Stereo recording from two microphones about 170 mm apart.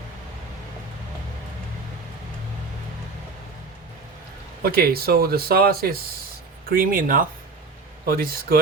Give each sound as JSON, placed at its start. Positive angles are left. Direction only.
{"t": 4.6, "sound": "speech", "side_deg": -60}